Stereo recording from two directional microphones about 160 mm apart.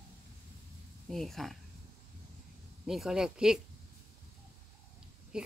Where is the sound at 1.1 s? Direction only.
Centre (ahead or behind).